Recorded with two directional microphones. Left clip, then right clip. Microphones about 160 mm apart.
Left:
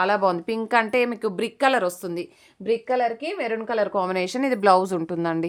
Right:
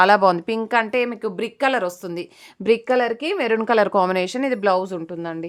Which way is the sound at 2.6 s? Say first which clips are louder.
Right 4 dB; 65° right (ahead or behind).